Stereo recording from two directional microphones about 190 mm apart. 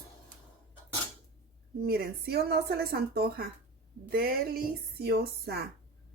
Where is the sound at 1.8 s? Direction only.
55° right (ahead or behind).